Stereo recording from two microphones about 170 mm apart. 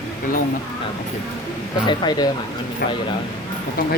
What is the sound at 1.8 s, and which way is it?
Speech, 25° left (ahead or behind).